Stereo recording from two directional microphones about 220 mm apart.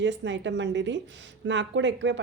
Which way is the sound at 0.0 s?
55° right (ahead or behind).